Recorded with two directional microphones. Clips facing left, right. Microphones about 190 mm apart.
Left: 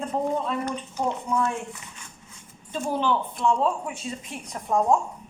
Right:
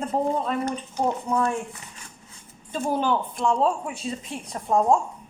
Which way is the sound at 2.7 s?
45° right (ahead or behind).